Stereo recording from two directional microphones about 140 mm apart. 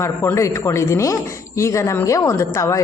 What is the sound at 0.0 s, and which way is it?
A woman's voice, 20° left (ahead or behind).